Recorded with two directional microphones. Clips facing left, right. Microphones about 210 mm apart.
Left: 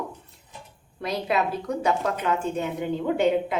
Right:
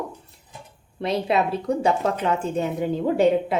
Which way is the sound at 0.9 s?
25° right (ahead or behind).